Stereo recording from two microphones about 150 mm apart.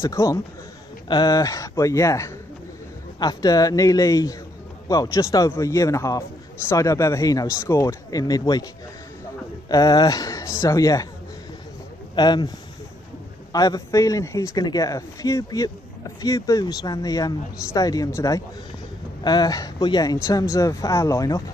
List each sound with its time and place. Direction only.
0.0 s speech: 20° left (ahead or behind)
9.7 s a man's voice: 25° left (ahead or behind)
12.2 s speech: 30° left (ahead or behind)